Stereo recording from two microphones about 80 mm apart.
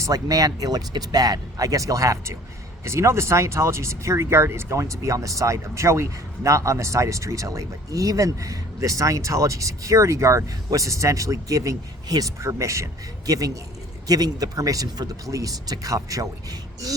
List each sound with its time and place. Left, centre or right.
0.0 s speech: right